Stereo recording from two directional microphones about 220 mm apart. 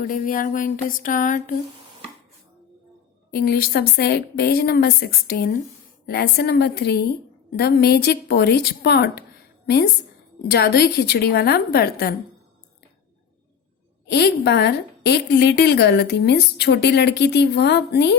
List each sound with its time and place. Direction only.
0.0 s a sound: 40° left (ahead or behind)
3.3 s a woman's voice: 45° left (ahead or behind)
14.1 s a woman's voice: 50° left (ahead or behind)